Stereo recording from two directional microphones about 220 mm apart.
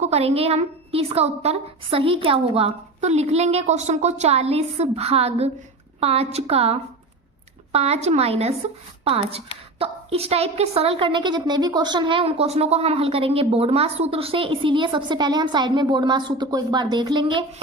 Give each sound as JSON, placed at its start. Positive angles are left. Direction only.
{"t": 0.0, "sound": "a woman's voice", "side_deg": -30}